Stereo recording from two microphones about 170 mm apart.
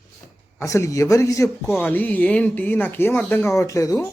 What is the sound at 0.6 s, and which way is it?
Speech, 20° left (ahead or behind).